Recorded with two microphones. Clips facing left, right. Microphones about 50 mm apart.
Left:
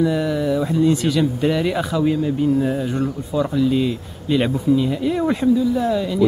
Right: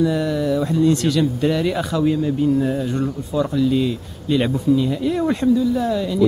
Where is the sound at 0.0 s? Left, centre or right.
Centre.